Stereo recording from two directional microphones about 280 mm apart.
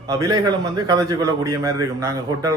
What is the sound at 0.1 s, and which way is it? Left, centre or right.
A man's voice, centre.